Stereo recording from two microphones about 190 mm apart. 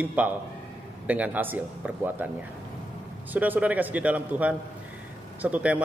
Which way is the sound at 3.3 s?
10° right (ahead or behind).